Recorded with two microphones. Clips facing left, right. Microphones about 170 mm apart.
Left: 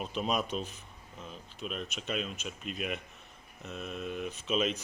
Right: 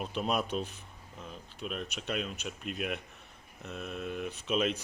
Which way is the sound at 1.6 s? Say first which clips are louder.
Right 1 dB; 5° right (ahead or behind).